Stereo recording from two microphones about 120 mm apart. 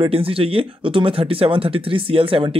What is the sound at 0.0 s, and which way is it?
Speech, 50° right (ahead or behind).